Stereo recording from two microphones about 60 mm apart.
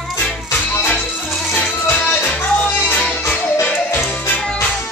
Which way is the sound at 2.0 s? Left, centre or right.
Left.